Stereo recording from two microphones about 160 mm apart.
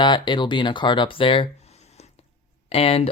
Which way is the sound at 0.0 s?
30° left (ahead or behind).